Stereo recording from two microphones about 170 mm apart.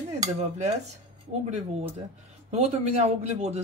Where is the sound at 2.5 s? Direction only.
40° right (ahead or behind).